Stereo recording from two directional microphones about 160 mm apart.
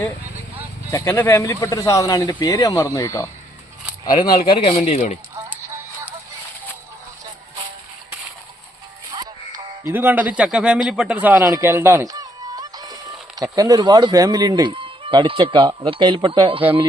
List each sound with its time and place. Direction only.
0.9 s speech: 15° left (ahead or behind)
4.6 s speech: 40° left (ahead or behind)
9.1 s music: 25° right (ahead or behind)
9.9 s a man's voice: 10° right (ahead or behind); by 16.8 s 35° right (ahead or behind)